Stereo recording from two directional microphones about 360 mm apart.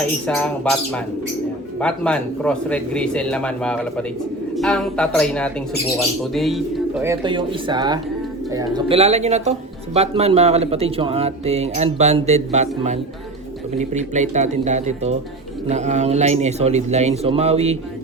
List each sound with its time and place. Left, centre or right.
0.3 s speech: centre